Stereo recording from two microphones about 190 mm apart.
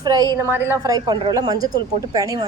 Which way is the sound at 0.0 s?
20° right (ahead or behind).